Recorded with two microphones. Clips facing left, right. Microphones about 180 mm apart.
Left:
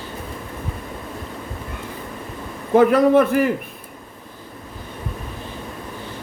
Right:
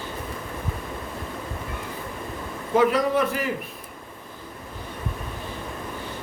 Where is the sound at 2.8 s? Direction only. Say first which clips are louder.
Left 7 dB; 55° left (ahead or behind).